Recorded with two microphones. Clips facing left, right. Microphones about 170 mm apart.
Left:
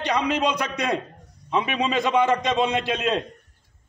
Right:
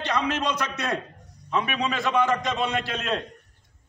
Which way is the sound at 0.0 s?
15° left (ahead or behind).